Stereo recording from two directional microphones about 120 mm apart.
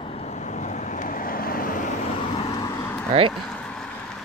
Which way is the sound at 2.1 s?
50° left (ahead or behind).